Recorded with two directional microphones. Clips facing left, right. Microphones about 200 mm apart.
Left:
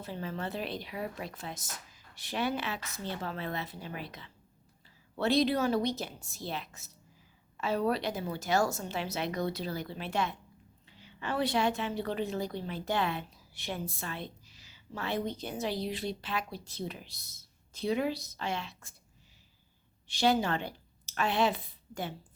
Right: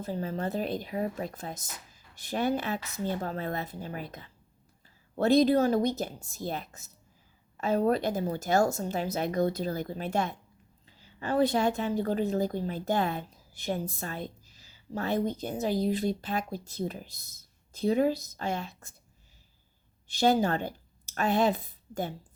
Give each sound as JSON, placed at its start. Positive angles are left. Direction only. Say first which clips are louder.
{"t": 0.0, "sound": "a woman's voice", "louder": "right 5 dB", "side_deg": -40}
{"t": 20.1, "sound": "a woman's voice", "louder": "right 3 dB", "side_deg": -40}